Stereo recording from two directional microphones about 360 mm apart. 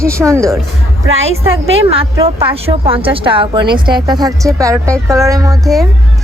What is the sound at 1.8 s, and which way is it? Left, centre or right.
A woman's voice, centre.